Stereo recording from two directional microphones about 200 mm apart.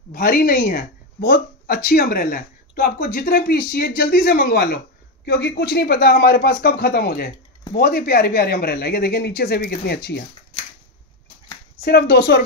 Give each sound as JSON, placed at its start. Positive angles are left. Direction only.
{"t": 0.1, "sound": "speech", "side_deg": 45}
{"t": 11.8, "sound": "speech", "side_deg": 50}